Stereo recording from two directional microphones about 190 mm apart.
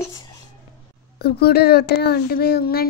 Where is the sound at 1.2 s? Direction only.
55° left (ahead or behind).